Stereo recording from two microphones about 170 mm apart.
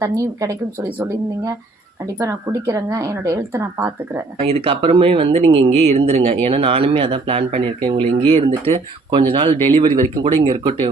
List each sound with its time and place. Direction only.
0.0 s speech: 20° right (ahead or behind)
4.4 s speech: 35° right (ahead or behind)
9.6 s speech: 30° right (ahead or behind)